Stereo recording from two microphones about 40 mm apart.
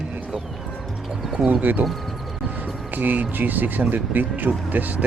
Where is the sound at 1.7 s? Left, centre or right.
Right.